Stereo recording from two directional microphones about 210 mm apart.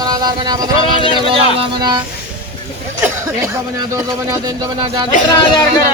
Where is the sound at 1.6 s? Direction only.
20° right (ahead or behind).